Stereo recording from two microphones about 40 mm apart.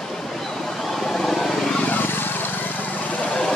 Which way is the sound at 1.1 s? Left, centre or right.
Centre.